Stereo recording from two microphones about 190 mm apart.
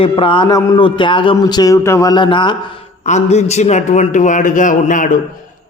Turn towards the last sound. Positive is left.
turn(degrees=45)  # may be behind; listen again after turning